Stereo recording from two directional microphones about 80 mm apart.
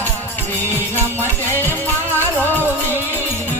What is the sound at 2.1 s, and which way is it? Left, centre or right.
Music, left.